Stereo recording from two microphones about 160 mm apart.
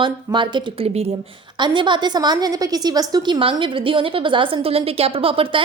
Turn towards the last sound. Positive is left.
turn(degrees=-35)  # may be behind; listen again after turning